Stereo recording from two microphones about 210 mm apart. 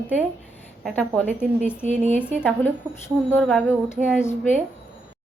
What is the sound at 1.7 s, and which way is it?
A woman's voice, 10° left (ahead or behind).